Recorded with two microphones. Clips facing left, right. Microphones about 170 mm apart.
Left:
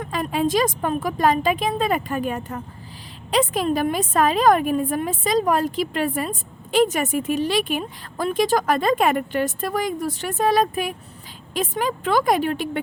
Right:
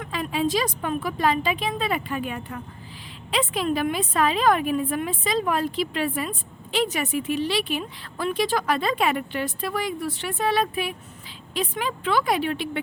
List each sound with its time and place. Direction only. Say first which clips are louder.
0.0 s a woman's voice: left 3 dB; 45° left (ahead or behind)